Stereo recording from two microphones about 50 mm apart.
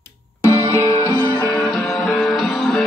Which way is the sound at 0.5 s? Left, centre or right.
Left.